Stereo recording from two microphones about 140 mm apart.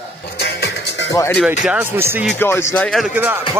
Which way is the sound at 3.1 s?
15° right (ahead or behind).